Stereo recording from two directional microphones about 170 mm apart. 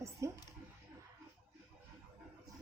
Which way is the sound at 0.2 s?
15° right (ahead or behind).